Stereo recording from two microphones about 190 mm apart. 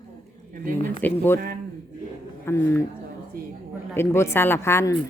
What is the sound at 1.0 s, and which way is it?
Speech, 10° left (ahead or behind).